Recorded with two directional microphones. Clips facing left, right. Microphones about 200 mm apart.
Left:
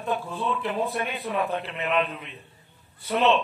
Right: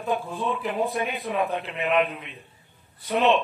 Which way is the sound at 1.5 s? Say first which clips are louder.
Right 2 dB; 15° right (ahead or behind).